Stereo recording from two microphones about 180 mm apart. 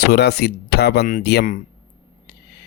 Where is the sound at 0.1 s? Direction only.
65° left (ahead or behind).